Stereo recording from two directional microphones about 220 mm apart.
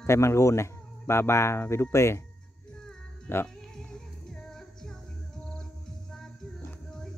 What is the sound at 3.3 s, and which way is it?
Music, 10° left (ahead or behind).